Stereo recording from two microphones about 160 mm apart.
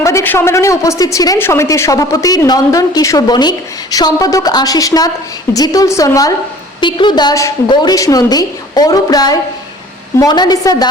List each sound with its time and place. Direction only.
0.0 s a woman's voice: 15° left (ahead or behind)